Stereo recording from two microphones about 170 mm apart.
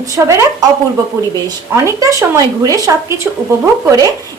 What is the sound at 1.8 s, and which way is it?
Speech, 20° right (ahead or behind).